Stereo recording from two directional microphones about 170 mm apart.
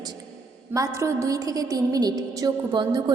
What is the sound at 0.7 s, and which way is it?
A woman's voice, 20° right (ahead or behind).